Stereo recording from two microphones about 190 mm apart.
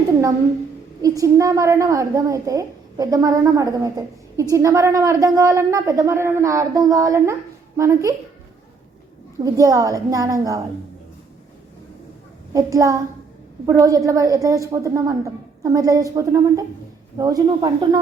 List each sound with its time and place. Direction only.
1.0 s a woman's voice: 15° right (ahead or behind)
9.4 s a woman's voice: 15° right (ahead or behind)
12.5 s a woman's voice: 15° right (ahead or behind)